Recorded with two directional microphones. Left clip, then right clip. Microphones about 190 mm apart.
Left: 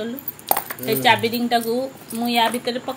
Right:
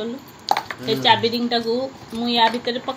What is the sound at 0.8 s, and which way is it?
A woman's voice, 10° left (ahead or behind).